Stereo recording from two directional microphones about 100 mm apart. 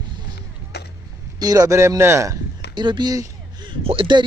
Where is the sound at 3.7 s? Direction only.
65° right (ahead or behind).